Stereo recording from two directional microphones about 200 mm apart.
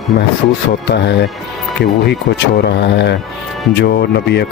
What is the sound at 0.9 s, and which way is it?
Speech, 60° left (ahead or behind).